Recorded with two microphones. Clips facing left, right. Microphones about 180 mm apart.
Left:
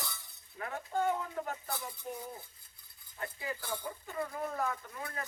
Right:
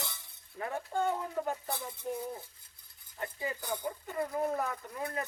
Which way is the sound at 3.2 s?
20° right (ahead or behind).